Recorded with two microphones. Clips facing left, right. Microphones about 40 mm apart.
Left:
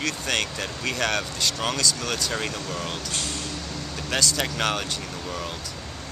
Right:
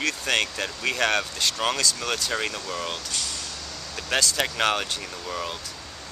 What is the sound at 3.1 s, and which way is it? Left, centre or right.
Speech, left.